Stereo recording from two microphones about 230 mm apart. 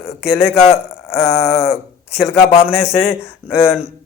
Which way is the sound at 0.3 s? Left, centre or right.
Centre.